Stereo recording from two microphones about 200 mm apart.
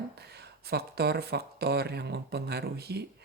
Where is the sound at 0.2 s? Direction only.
55° right (ahead or behind).